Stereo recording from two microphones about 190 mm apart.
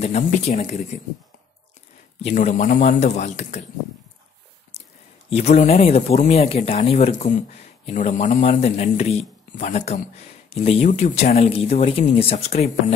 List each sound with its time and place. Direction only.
0.0 s speech: 35° left (ahead or behind)
2.2 s speech: 40° left (ahead or behind)
4.7 s a sound: 35° left (ahead or behind)
5.3 s speech: 35° left (ahead or behind)